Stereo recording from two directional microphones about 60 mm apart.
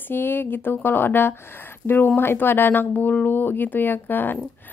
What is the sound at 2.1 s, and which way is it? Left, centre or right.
A woman's voice, left.